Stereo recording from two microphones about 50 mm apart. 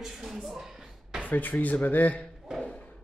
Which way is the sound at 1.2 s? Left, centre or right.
Left.